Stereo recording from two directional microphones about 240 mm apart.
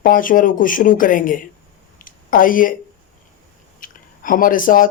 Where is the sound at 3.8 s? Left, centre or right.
Left.